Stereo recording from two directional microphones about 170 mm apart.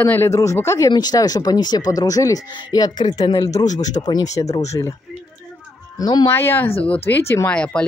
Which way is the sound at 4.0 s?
25° left (ahead or behind).